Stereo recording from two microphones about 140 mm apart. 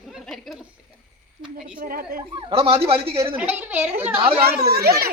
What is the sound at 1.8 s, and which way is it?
Speech, 90° right.